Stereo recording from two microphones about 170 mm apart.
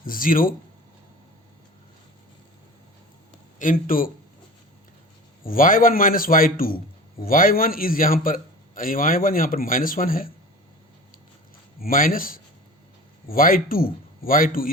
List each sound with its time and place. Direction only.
0.0 s a man's voice: 55° left (ahead or behind)
3.6 s a man's voice: 55° left (ahead or behind)
5.4 s a man's voice: 55° left (ahead or behind)
11.8 s a man's voice: 55° left (ahead or behind)